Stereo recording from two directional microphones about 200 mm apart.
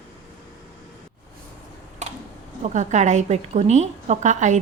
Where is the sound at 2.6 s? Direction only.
35° right (ahead or behind).